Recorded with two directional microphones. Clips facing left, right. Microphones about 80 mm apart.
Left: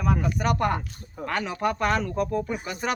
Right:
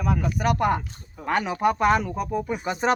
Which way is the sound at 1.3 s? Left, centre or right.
Centre.